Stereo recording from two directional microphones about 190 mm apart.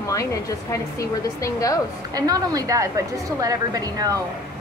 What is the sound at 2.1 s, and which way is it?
A woman's voice, 20° right (ahead or behind).